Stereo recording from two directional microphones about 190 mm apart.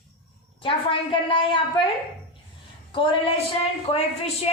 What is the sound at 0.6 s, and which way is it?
A woman's voice, 25° left (ahead or behind).